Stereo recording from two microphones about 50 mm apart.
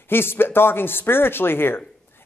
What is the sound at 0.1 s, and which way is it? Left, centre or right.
Speech, left.